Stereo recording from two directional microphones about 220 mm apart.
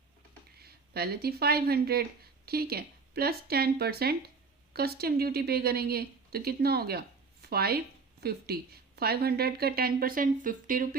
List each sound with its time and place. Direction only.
0.6 s a woman's voice: 45° right (ahead or behind)